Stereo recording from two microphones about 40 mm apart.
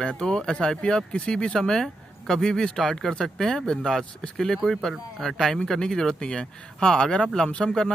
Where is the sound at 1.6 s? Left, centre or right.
Centre.